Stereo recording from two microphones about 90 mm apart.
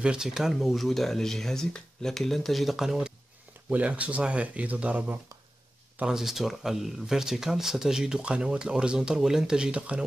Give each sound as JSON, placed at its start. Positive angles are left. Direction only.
{"t": 0.0, "sound": "speech", "side_deg": -10}
{"t": 3.7, "sound": "speech", "side_deg": -15}
{"t": 6.0, "sound": "speech", "side_deg": -5}